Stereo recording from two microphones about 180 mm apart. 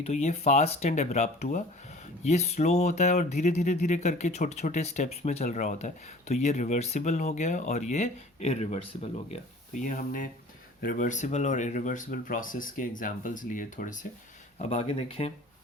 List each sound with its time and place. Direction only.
0.0 s speech: 35° left (ahead or behind)
14.6 s speech: 35° left (ahead or behind)